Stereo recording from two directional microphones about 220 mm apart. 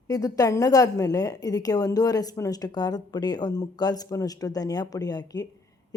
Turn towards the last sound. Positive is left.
turn(degrees=15)  # may be behind; listen again after turning